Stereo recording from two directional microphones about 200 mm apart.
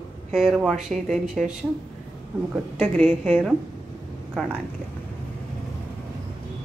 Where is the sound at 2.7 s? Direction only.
5° left (ahead or behind).